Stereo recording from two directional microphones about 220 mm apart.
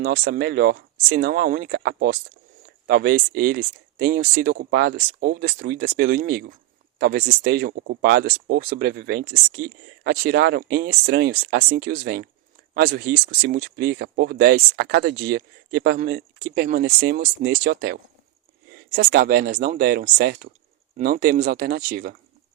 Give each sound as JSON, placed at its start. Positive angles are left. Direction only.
{"t": 0.0, "sound": "speech", "side_deg": -45}